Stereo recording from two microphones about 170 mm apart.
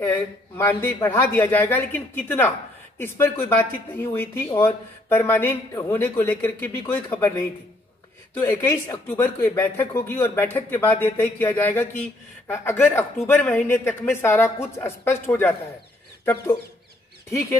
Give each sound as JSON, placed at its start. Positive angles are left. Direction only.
{"t": 0.0, "sound": "speech", "side_deg": 15}
{"t": 17.3, "sound": "speech", "side_deg": 15}